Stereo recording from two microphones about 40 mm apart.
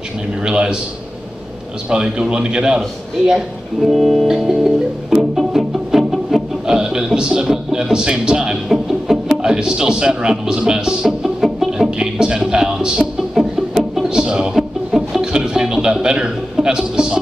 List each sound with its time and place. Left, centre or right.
0.5 s a man's voice: right
1.9 s a man's voice: right
3.8 s music: centre
6.7 s a sound: centre
11.1 s music: centre
12.0 s a sound: centre
13.3 s music: centre
14.0 s music: centre
14.9 s music: centre
15.3 s a sound: centre